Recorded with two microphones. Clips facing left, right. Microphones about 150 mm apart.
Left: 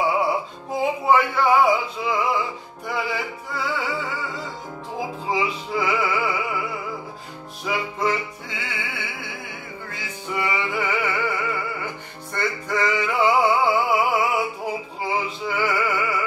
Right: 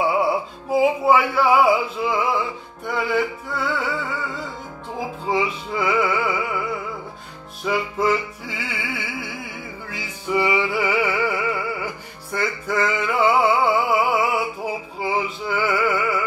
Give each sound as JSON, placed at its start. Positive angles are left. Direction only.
{"t": 0.0, "sound": "music", "side_deg": 0}
{"t": 5.3, "sound": "music", "side_deg": 0}
{"t": 7.6, "sound": "music", "side_deg": 0}